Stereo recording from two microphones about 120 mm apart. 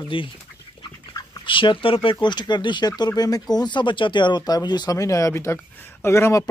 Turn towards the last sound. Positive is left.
turn(degrees=25)  # may be behind; listen again after turning